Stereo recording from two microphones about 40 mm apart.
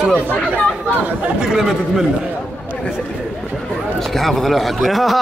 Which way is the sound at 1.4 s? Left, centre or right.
Centre.